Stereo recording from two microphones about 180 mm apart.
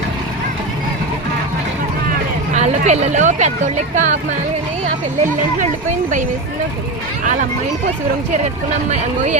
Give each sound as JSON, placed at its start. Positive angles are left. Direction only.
{"t": 2.6, "sound": "speech", "side_deg": -40}
{"t": 8.9, "sound": "speech", "side_deg": -40}